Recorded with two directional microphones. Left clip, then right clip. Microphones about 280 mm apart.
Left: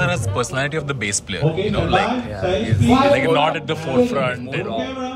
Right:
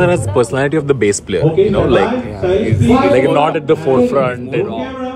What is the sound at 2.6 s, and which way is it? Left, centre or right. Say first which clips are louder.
Speech: right 1 dB; left.